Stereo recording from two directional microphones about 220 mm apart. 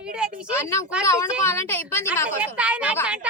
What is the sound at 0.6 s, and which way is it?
A woman's voice, 15° left (ahead or behind).